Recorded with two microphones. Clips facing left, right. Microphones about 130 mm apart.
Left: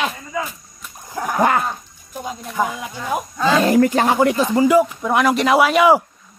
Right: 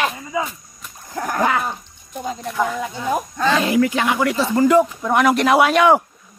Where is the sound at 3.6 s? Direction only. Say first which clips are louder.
Left 3 dB; 45° left (ahead or behind).